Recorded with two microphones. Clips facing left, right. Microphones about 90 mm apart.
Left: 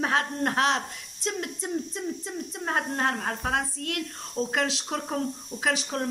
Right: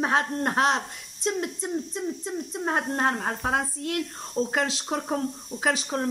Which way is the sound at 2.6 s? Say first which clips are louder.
Right 2 dB; 25° right (ahead or behind).